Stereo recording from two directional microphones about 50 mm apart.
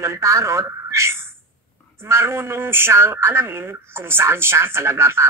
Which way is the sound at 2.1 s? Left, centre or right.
Right.